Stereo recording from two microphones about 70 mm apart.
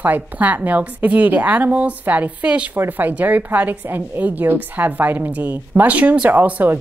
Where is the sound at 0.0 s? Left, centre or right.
Right.